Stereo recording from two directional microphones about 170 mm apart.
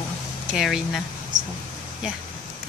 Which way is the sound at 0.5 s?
Centre (ahead or behind).